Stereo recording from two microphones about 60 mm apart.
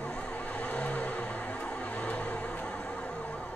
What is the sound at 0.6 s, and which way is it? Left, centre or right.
Vehicle, left.